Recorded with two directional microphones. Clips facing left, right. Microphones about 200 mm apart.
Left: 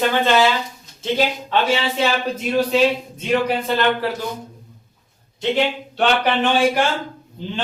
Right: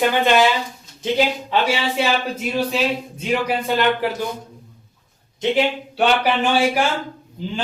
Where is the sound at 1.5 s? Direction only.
10° right (ahead or behind).